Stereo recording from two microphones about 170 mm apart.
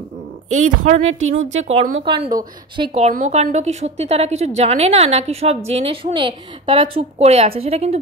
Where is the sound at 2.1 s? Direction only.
25° right (ahead or behind).